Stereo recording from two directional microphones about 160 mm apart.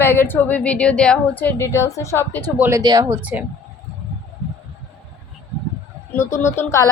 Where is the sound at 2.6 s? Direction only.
20° right (ahead or behind).